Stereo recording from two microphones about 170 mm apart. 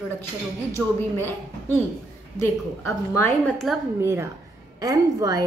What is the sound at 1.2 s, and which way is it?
A woman's voice, 10° left (ahead or behind).